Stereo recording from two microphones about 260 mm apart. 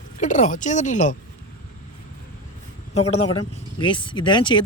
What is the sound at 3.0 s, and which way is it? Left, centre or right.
Speech, centre.